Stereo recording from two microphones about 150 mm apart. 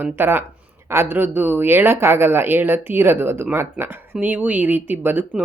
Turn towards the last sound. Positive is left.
turn(degrees=-15)  # may be behind; listen again after turning